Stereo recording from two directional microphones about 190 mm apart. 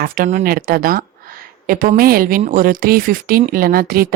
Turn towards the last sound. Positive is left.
turn(degrees=-50)  # may be behind; listen again after turning